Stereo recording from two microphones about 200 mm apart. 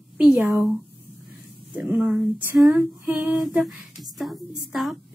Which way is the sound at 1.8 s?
10° right (ahead or behind).